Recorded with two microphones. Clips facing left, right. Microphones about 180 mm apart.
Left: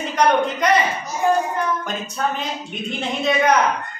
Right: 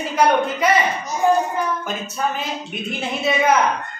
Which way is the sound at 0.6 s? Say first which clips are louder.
Even; 5° right (ahead or behind).